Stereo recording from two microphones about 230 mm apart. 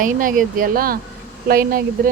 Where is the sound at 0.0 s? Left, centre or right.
Right.